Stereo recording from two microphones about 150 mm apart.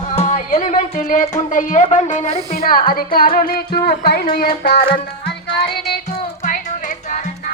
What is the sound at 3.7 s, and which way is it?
Music, 90° left.